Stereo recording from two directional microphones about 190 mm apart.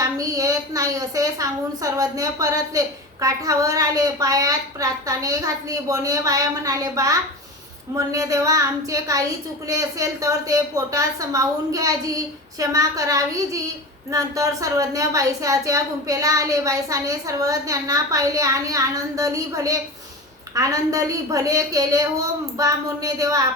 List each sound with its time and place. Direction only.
0.0 s a woman's voice: 15° right (ahead or behind)